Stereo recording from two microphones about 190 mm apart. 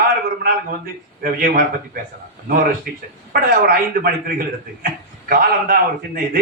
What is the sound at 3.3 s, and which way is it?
A man's voice, 50° right (ahead or behind).